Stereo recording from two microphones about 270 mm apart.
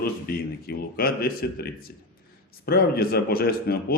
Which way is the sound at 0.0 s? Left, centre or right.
Left.